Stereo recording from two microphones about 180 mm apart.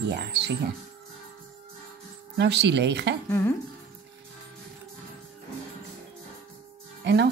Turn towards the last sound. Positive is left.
turn(degrees=-70)  # may be behind; listen again after turning